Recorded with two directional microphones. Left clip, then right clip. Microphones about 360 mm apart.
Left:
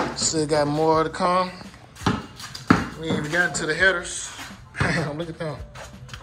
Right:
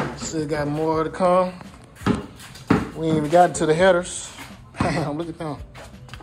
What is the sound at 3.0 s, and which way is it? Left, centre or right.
Speech, right.